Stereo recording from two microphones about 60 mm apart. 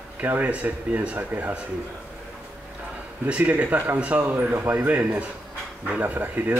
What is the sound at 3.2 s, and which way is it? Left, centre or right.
Speech, right.